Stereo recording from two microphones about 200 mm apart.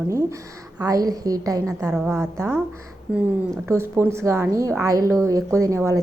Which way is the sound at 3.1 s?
5° right (ahead or behind).